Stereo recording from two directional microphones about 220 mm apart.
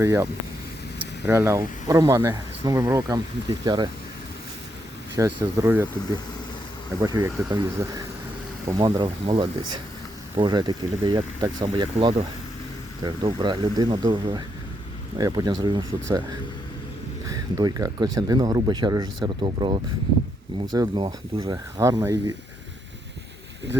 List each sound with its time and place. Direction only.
0.0 s speech: 15° right (ahead or behind)
1.3 s speech: 15° right (ahead or behind)
5.1 s speech: 15° right (ahead or behind)
7.0 s speech: 15° right (ahead or behind)
17.2 s speech: 15° right (ahead or behind)